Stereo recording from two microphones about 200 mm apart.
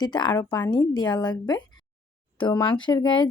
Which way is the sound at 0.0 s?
20° left (ahead or behind).